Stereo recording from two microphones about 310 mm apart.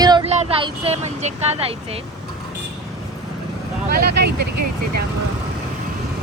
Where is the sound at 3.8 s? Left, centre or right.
Right.